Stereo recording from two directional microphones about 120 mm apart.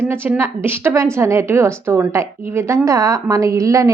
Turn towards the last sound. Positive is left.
turn(degrees=-25)  # may be behind; listen again after turning